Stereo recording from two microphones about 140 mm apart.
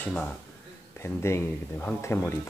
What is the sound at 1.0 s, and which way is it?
Speech, 20° left (ahead or behind).